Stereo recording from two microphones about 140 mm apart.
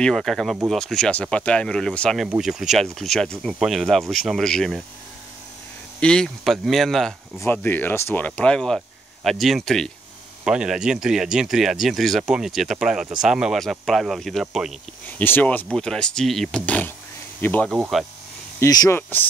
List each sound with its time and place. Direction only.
0.0 s speech: centre (ahead or behind)
5.9 s speech: 5° left (ahead or behind)
7.3 s speech: 15° left (ahead or behind); by 14.7 s 5° right (ahead or behind)
15.0 s speech: 15° left (ahead or behind)
18.6 s speech: 25° left (ahead or behind)